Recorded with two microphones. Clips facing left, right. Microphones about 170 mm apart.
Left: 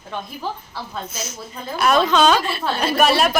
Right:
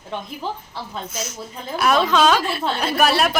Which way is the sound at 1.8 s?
5° right (ahead or behind).